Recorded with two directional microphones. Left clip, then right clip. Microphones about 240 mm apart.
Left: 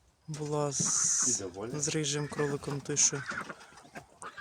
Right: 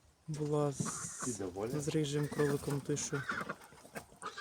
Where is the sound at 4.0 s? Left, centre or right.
Right.